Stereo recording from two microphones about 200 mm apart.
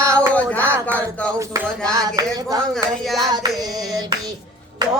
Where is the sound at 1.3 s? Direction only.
15° right (ahead or behind).